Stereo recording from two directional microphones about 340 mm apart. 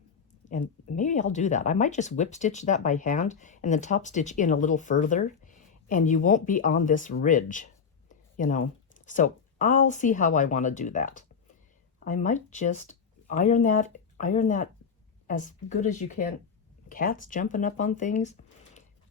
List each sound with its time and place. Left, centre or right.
0.9 s speech: left